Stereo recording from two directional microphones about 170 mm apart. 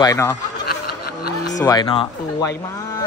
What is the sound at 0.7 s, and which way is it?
Snicker, 65° left (ahead or behind).